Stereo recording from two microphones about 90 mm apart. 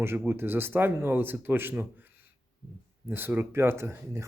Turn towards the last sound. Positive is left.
turn(degrees=-30)  # may be behind; listen again after turning